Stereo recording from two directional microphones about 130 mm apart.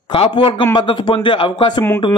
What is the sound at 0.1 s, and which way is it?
A man's voice, 45° left (ahead or behind).